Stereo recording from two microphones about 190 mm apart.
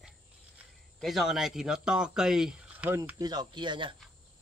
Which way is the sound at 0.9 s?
Centre (ahead or behind).